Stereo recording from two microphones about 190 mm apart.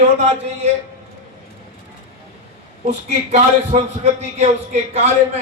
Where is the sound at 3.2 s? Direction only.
35° right (ahead or behind).